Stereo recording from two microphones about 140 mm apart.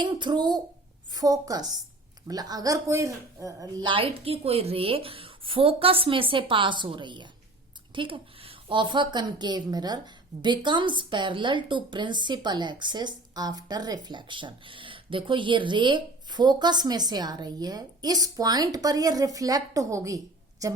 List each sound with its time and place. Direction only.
0.0 s a woman's voice: 35° right (ahead or behind)